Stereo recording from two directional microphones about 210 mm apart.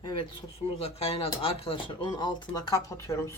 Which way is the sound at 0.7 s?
30° left (ahead or behind).